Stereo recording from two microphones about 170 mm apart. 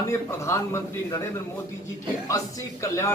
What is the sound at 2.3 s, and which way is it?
Speech, 20° left (ahead or behind).